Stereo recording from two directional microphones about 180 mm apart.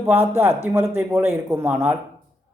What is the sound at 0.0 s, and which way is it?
A man's voice, 10° right (ahead or behind).